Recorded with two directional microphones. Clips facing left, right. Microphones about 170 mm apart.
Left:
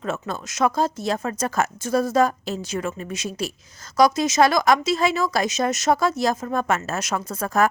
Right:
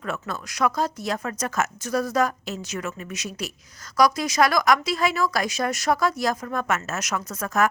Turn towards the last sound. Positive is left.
turn(degrees=30)  # may be behind; listen again after turning